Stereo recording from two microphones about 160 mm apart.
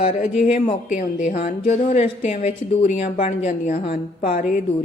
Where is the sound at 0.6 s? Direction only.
50° left (ahead or behind).